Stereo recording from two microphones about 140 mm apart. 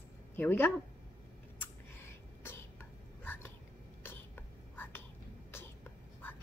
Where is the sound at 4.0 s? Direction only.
15° left (ahead or behind).